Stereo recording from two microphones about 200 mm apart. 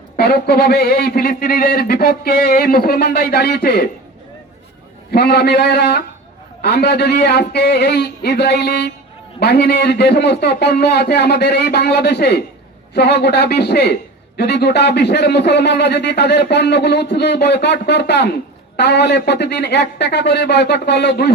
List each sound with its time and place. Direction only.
0.2 s speech: 50° left (ahead or behind)
5.1 s speech: 55° left (ahead or behind)